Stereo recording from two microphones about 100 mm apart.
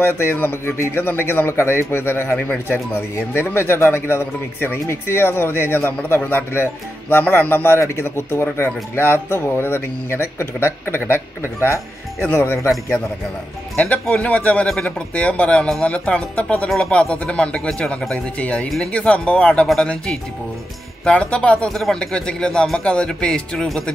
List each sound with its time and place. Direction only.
0.0 s a man's voice: 20° left (ahead or behind)
13.7 s speech: 15° left (ahead or behind)
14.7 s speech: 5° left (ahead or behind)